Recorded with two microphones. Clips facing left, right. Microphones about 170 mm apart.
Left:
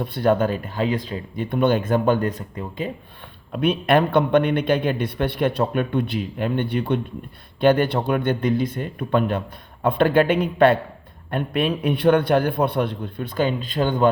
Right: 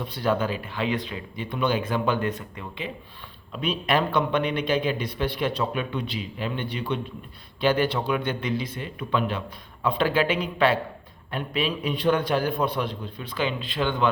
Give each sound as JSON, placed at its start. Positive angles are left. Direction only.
{"t": 0.0, "sound": "speech", "side_deg": 55}
{"t": 1.4, "sound": "speech", "side_deg": 50}
{"t": 3.5, "sound": "a man's voice", "side_deg": 60}